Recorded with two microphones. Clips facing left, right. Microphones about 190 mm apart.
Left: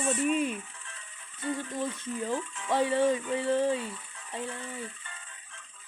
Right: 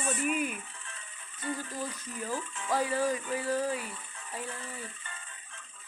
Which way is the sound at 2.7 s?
25° left (ahead or behind).